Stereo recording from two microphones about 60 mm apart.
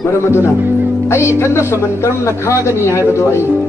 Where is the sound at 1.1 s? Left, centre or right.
Left.